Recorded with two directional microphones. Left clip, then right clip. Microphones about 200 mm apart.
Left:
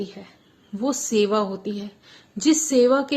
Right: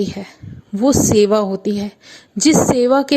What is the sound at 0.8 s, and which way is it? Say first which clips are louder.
A woman's voice: right 9 dB; 35° right (ahead or behind).